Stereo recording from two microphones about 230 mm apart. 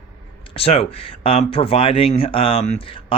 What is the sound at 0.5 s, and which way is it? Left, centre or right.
Speech, left.